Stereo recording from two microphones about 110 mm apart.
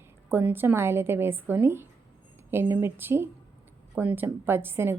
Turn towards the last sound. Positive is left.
turn(degrees=-20)  # may be behind; listen again after turning